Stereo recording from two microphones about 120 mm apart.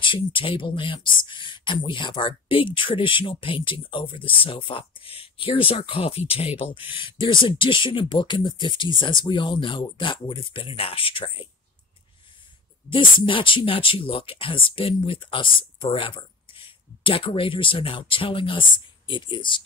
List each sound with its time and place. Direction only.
0.0 s speech: 45° left (ahead or behind)
12.9 s speech: 45° left (ahead or behind)